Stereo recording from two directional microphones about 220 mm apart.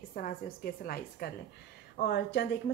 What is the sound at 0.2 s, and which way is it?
A woman's voice, 40° left (ahead or behind).